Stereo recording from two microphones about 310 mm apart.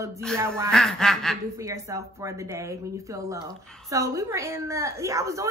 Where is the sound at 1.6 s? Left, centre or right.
Centre.